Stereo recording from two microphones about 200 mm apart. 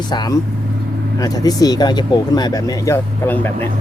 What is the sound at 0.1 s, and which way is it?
Speech, 20° left (ahead or behind).